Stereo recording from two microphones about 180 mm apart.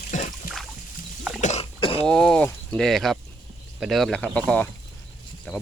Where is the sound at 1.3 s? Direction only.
40° left (ahead or behind).